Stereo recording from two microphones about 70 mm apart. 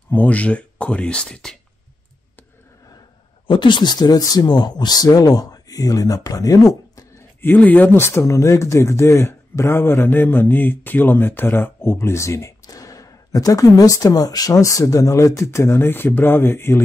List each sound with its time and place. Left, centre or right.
0.1 s speech: left
3.7 s speech: left
7.4 s speech: left
8.0 s speech: left
12.6 s speech: left